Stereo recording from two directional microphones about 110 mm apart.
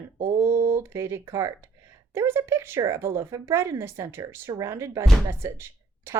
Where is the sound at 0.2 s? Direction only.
25° right (ahead or behind).